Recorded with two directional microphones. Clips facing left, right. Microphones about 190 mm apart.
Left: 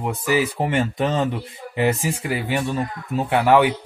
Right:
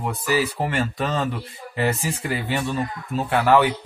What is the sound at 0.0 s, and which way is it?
Speech, 15° left (ahead or behind).